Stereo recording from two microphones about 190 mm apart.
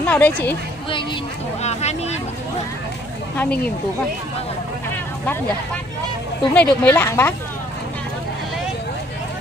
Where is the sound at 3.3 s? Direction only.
10° left (ahead or behind).